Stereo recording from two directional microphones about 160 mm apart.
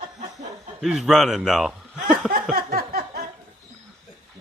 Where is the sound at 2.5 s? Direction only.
70° right (ahead or behind).